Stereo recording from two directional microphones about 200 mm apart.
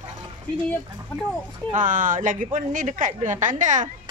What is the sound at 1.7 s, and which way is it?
A woman's voice, 40° right (ahead or behind).